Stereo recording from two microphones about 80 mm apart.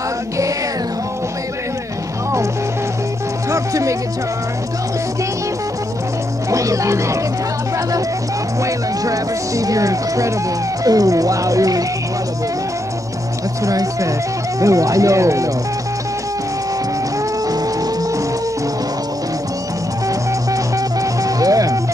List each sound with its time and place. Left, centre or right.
3.4 s music: right
6.5 s speech: right
8.6 s speech: right
13.7 s speech: right
20.1 s music: right